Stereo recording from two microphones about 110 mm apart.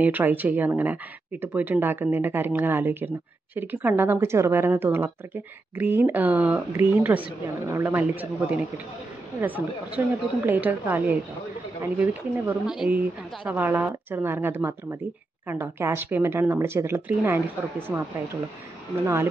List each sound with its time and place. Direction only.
0.0 s a woman's voice: 15° right (ahead or behind)
13.5 s a woman's voice: 15° right (ahead or behind)
17.9 s a woman's voice: 5° right (ahead or behind)